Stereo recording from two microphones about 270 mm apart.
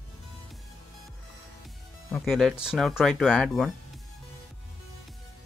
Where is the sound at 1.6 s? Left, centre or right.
Centre.